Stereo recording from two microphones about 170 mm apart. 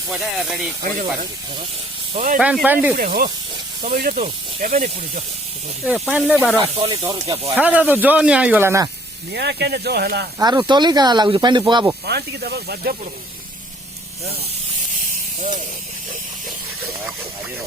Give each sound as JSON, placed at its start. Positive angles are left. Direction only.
{"t": 0.1, "sound": "speech", "side_deg": 0}
{"t": 0.8, "sound": "speech", "side_deg": -50}
{"t": 2.1, "sound": "speech", "side_deg": -50}
{"t": 2.4, "sound": "speech", "side_deg": -5}
{"t": 3.9, "sound": "speech", "side_deg": -50}
{"t": 5.8, "sound": "speech", "side_deg": -5}
{"t": 6.6, "sound": "speech", "side_deg": -35}
{"t": 6.9, "sound": "speech", "side_deg": -20}
{"t": 7.5, "sound": "speech", "side_deg": -10}
{"t": 9.3, "sound": "speech", "side_deg": -85}
{"t": 10.3, "sound": "speech", "side_deg": -20}
{"t": 12.0, "sound": "speech", "side_deg": -75}
{"t": 15.4, "sound": "speech", "side_deg": -45}